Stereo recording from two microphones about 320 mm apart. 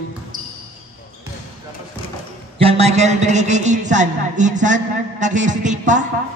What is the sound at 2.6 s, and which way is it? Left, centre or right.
A man's voice, centre.